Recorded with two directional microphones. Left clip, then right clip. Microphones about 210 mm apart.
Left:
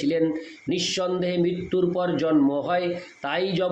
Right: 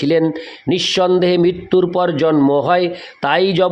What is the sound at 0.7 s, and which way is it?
A man's voice, 50° right (ahead or behind).